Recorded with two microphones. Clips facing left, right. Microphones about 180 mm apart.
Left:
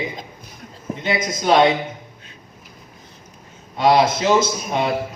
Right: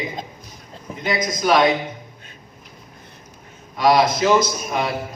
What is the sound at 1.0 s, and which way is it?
Speech, 25° left (ahead or behind).